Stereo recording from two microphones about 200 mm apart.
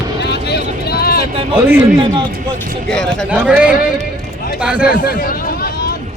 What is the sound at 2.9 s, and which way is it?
A man's voice, 5° left (ahead or behind).